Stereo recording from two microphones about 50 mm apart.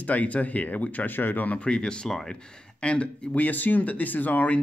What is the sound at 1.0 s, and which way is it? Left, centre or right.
Speech, left.